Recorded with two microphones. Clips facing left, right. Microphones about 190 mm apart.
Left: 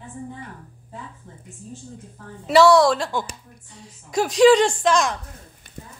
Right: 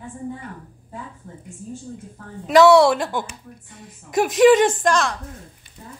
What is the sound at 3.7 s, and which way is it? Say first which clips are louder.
Speech: right 2 dB; 55° right (ahead or behind).